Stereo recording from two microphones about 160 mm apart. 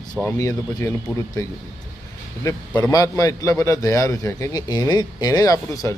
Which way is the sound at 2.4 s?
20° left (ahead or behind).